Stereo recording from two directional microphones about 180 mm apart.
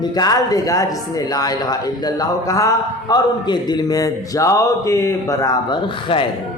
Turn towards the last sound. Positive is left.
turn(degrees=25)  # may be behind; listen again after turning